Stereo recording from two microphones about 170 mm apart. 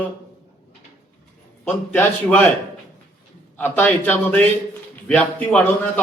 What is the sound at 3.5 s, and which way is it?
A man's voice, 10° left (ahead or behind).